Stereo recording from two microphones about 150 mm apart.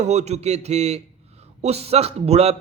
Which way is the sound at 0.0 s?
50° right (ahead or behind).